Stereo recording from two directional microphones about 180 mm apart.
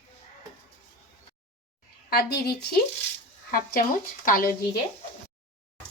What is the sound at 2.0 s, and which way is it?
Speech, 60° left (ahead or behind).